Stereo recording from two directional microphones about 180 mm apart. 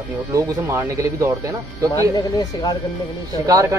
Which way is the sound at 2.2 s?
25° left (ahead or behind).